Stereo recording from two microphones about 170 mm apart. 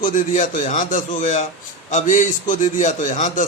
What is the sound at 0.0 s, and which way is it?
A man's voice, 50° left (ahead or behind).